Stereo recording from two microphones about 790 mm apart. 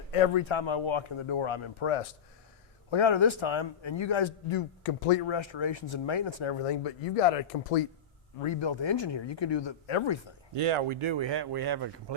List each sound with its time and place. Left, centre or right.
0.1 s a man's voice: left
8.4 s a man's voice: left
10.5 s speech: right